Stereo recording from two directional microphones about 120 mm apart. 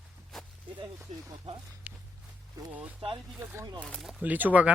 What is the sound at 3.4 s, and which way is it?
Speech, 20° right (ahead or behind).